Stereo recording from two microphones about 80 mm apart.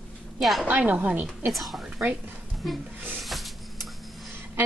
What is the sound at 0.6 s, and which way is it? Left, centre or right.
Speech, right.